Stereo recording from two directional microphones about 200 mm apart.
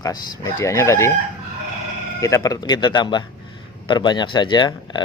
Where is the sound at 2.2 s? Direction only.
15° left (ahead or behind).